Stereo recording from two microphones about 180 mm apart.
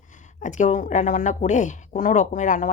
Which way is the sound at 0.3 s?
45° left (ahead or behind).